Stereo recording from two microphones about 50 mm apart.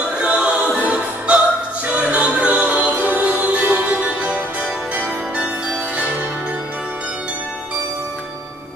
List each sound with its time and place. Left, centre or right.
0.2 s choir: right
1.9 s music: right
3.2 s music: right